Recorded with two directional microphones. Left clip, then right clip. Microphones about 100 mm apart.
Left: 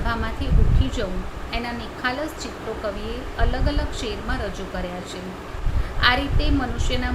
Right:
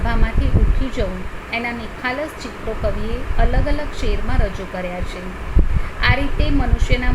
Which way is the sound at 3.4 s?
30° right (ahead or behind).